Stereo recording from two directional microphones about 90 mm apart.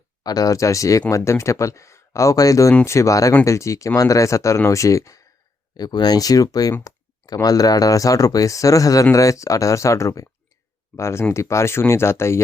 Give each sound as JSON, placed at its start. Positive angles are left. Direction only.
{"t": 0.2, "sound": "speech", "side_deg": 45}
{"t": 5.7, "sound": "speech", "side_deg": 50}